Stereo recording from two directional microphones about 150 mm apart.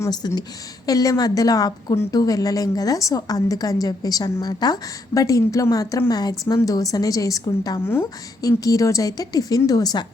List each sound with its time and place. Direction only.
0.0 s a woman's voice: 25° left (ahead or behind)